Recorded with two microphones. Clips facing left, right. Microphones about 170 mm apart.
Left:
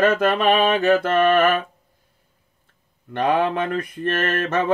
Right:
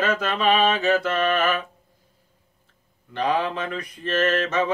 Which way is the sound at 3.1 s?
55° left (ahead or behind).